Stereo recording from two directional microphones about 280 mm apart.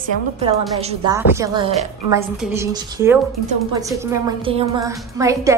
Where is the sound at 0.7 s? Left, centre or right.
Right.